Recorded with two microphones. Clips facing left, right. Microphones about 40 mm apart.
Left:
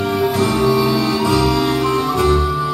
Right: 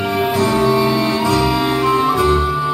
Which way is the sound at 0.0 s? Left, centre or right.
Right.